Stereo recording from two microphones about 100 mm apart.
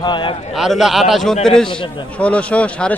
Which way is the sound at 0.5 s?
5° right (ahead or behind).